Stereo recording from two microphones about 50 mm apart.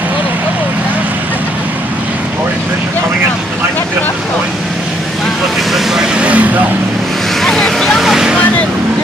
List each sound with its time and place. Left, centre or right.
6.1 s vehicle: right
7.4 s vehicle: centre
8.0 s vehicle: centre